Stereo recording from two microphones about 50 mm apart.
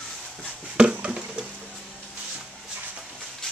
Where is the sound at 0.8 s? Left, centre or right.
Centre.